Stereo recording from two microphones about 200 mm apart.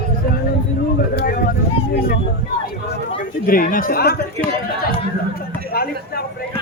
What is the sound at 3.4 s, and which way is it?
Speech, 45° left (ahead or behind).